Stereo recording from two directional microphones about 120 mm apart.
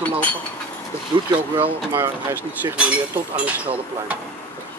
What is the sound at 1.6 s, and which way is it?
Speech, 20° right (ahead or behind).